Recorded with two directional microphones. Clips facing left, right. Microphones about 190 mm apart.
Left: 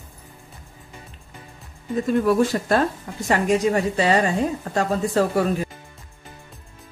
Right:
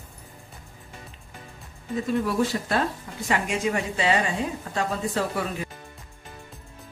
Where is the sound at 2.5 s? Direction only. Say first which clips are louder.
Left 4 dB; 55° left (ahead or behind).